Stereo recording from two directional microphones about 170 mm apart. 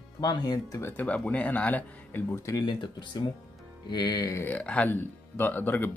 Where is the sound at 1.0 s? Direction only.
10° left (ahead or behind).